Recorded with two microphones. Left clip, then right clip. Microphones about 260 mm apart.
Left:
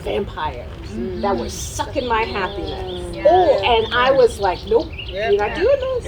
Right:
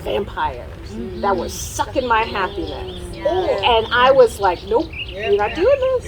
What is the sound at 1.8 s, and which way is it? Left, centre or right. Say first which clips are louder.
Speech: right 2 dB; centre.